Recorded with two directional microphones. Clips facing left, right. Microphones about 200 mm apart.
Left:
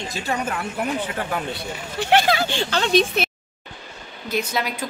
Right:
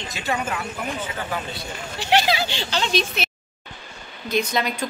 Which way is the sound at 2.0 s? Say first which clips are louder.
Left 2 dB; 55° left (ahead or behind).